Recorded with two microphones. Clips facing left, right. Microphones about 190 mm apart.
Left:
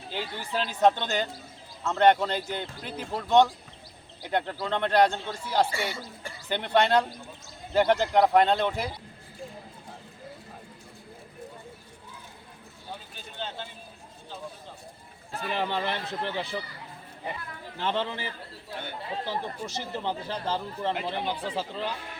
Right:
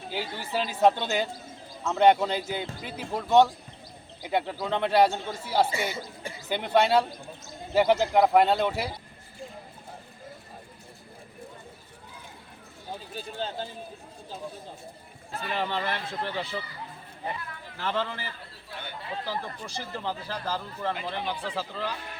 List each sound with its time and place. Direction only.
0.1 s speech: 10° right (ahead or behind)
5.9 s speech: 20° right (ahead or behind)
6.5 s speech: 5° right (ahead or behind)
13.1 s speech: 35° right (ahead or behind)
15.5 s speech: 15° left (ahead or behind)
17.7 s speech: 20° left (ahead or behind)